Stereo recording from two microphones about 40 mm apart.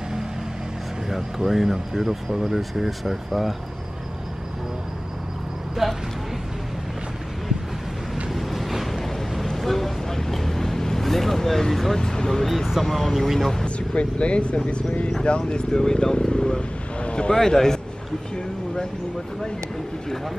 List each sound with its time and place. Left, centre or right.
1.0 s speech: centre
5.8 s speech: centre
8.3 s vehicle: centre
12.0 s speech: centre
12.4 s speech: centre
13.7 s speech: left
17.4 s speech: centre